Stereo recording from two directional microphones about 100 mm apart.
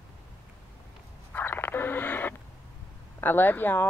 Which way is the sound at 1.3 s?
20° left (ahead or behind).